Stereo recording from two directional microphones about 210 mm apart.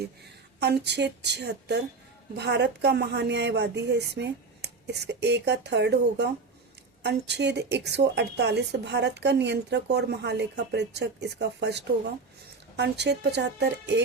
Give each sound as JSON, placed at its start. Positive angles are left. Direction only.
{"t": 0.6, "sound": "a woman's voice", "side_deg": -55}